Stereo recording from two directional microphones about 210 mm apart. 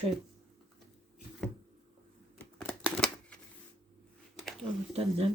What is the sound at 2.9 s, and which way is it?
Typewriter, 5° left (ahead or behind).